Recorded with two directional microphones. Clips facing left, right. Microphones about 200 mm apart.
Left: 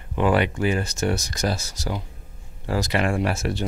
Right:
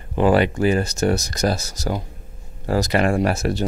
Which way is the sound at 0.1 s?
35° right (ahead or behind).